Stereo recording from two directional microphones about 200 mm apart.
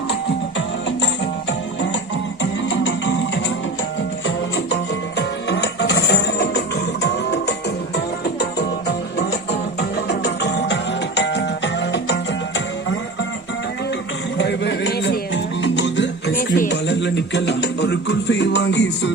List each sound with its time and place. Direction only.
2.4 s music: 65° left (ahead or behind)
4.5 s music: 60° left (ahead or behind)
14.3 s a sound: 60° left (ahead or behind)
15.6 s music: 65° left (ahead or behind)